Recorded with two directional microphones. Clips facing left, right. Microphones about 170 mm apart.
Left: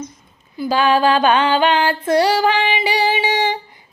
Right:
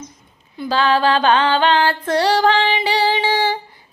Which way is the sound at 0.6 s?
10° left (ahead or behind).